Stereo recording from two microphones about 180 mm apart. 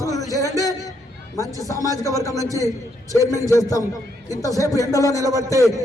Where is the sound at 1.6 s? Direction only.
20° left (ahead or behind).